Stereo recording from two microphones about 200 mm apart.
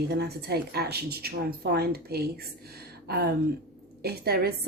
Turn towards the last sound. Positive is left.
turn(degrees=-50)  # may be behind; listen again after turning